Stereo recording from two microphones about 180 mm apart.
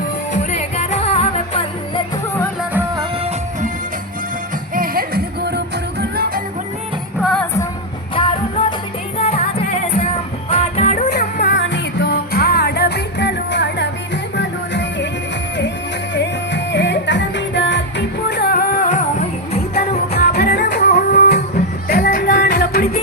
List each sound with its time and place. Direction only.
0.3 s music: 40° left (ahead or behind)
4.7 s music: 55° right (ahead or behind)
7.2 s music: centre (ahead or behind)
8.1 s music: 30° left (ahead or behind)
10.5 s music: 40° left (ahead or behind)
11.1 s music: 65° left (ahead or behind)
16.1 s music: 75° left (ahead or behind); by 19.0 s 45° left (ahead or behind)
20.1 s music: 60° left (ahead or behind)